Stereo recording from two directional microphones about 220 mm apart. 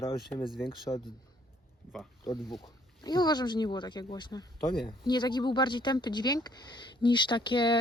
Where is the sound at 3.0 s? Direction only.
20° left (ahead or behind).